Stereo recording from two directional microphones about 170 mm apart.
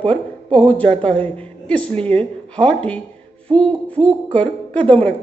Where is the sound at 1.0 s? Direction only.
10° left (ahead or behind).